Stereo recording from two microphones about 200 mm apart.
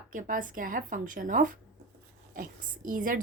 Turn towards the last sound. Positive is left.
turn(degrees=-45)  # may be behind; listen again after turning